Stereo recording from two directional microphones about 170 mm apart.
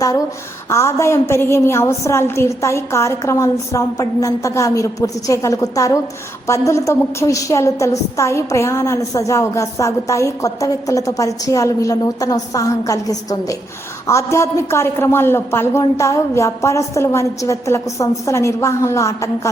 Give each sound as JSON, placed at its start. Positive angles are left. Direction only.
{"t": 0.7, "sound": "a woman's voice", "side_deg": 15}